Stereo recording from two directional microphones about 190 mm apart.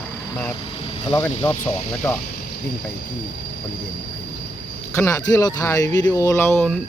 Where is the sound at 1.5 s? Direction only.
5° left (ahead or behind).